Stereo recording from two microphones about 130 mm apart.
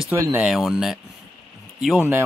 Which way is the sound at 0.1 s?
20° right (ahead or behind).